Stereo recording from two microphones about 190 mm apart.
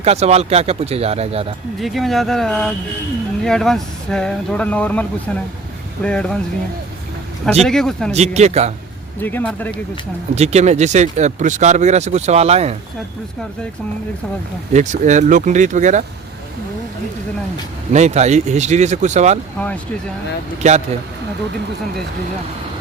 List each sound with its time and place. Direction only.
0.0 s speech: 35° right (ahead or behind)
1.8 s speech: centre (ahead or behind)
7.6 s speech: centre (ahead or behind)
8.1 s speech: 35° right (ahead or behind)
9.2 s speech: 10° left (ahead or behind)
10.3 s speech: 35° right (ahead or behind)
14.7 s speech: 40° right (ahead or behind)
17.9 s speech: 35° right (ahead or behind)
19.5 s speech: 10° left (ahead or behind)
20.6 s speech: 35° right (ahead or behind)